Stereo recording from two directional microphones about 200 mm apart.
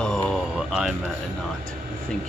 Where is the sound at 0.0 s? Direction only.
5° left (ahead or behind).